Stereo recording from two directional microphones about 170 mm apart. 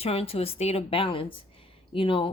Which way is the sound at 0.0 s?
35° left (ahead or behind).